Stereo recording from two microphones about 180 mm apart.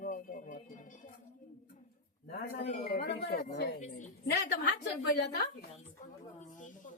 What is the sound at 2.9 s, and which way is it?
Speech, 65° left (ahead or behind).